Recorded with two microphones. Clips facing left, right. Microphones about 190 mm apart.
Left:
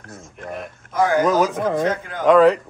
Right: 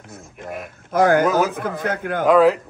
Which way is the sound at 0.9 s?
65° right (ahead or behind).